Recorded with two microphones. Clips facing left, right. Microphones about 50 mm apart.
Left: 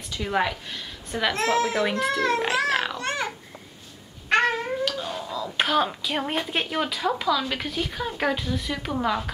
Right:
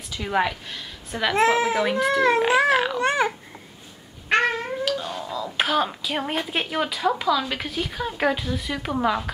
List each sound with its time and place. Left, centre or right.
0.1 s a woman's voice: centre
1.3 s a child's voice: centre
2.2 s a child's voice: centre
4.3 s speech: centre